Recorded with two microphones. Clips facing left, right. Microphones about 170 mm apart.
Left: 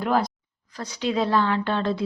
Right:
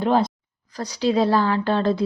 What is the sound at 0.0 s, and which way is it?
Speech, 25° right (ahead or behind).